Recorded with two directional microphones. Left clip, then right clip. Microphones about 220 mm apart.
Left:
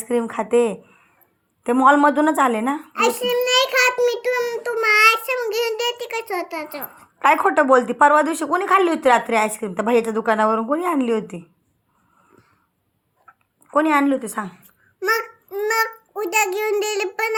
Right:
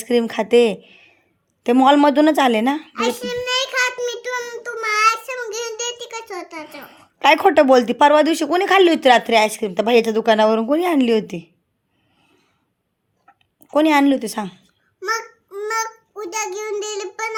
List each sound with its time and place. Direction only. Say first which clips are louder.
0.0 s speech: right 3 dB; 45° right (ahead or behind)
2.9 s child singing: left 3 dB; 10° right (ahead or behind)
7.2 s speech: right 3 dB; 45° right (ahead or behind)
13.2 s a sound: left 2 dB; 45° right (ahead or behind)
15.0 s babbling: left 3 dB; 10° right (ahead or behind)